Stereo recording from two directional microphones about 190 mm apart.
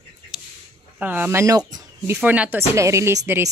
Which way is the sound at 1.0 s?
10° right (ahead or behind).